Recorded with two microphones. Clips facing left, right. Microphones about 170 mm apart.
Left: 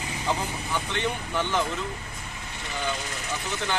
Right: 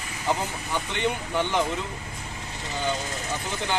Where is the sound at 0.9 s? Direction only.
15° right (ahead or behind).